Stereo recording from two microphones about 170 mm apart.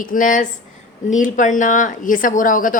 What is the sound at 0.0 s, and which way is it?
A woman's voice, 50° left (ahead or behind).